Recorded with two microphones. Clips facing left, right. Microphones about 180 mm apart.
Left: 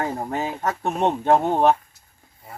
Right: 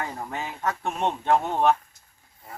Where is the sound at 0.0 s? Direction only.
40° left (ahead or behind).